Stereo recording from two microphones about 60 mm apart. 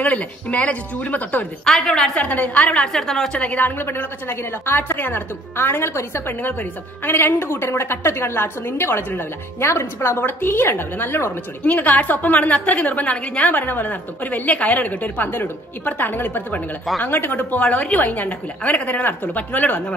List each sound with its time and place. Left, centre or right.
0.0 s a woman's voice: left
1.6 s a woman's voice: centre
2.1 s a woman's voice: left
2.9 s a woman's voice: centre
3.3 s a woman's voice: left
11.6 s a woman's voice: left